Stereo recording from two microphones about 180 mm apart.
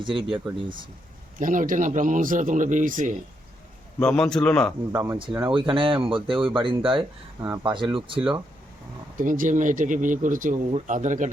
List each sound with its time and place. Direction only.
0.0 s speech: 30° right (ahead or behind)
1.4 s speech: 45° right (ahead or behind)
4.0 s a man's voice: 5° left (ahead or behind)
4.9 s speech: 10° right (ahead or behind)
5.5 s speech: 30° right (ahead or behind)
9.1 s speech: 50° right (ahead or behind)